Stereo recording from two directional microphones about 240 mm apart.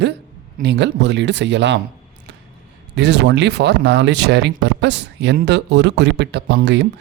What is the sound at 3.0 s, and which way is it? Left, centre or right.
Speech, right.